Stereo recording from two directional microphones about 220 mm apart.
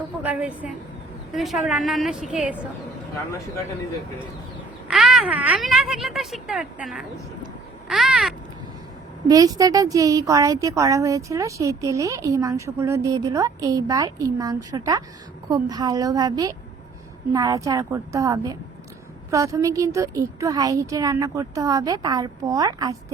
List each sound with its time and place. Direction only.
0.2 s speech: 5° right (ahead or behind)
4.9 s speech: centre (ahead or behind)
7.9 s a sound: centre (ahead or behind)
9.3 s speech: 15° right (ahead or behind)